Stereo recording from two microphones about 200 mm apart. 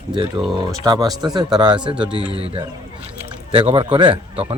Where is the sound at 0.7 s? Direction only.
20° right (ahead or behind).